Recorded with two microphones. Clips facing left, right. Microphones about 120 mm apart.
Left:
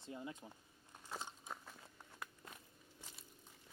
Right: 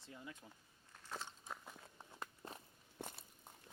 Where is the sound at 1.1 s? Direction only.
10° left (ahead or behind).